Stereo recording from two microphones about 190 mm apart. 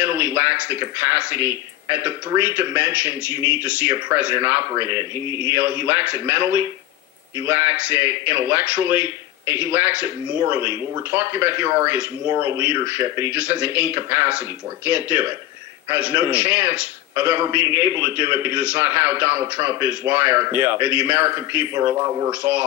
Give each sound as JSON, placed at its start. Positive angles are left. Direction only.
{"t": 0.0, "sound": "a man's voice", "side_deg": -10}